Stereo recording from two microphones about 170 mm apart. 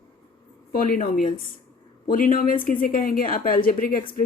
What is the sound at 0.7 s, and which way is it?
A woman's voice, 55° left (ahead or behind).